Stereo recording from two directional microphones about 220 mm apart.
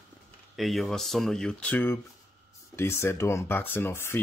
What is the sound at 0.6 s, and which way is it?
Speech, centre (ahead or behind).